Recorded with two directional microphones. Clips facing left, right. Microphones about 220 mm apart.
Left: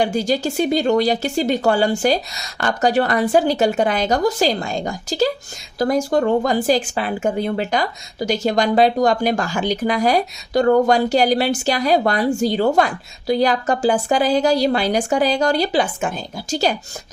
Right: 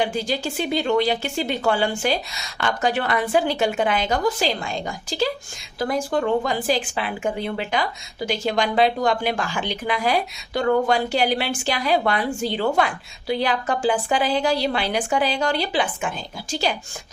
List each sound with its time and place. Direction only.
0.0 s speech: 45° left (ahead or behind)